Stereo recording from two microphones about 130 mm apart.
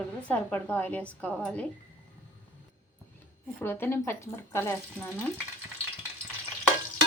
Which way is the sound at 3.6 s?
15° left (ahead or behind).